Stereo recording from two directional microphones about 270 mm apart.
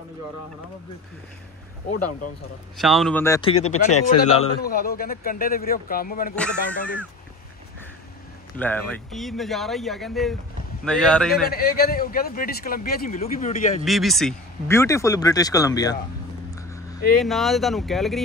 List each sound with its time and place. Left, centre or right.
2.8 s speech: centre
3.3 s speech: left
4.6 s a man's voice: left
6.3 s speech: centre
8.5 s speech: centre
11.4 s a man's voice: left
13.8 s speech: centre
17.2 s speech: centre